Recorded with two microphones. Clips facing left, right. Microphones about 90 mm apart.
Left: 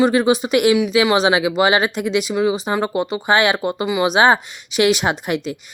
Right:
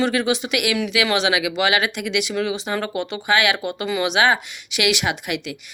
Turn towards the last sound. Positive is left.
turn(degrees=35)  # may be behind; listen again after turning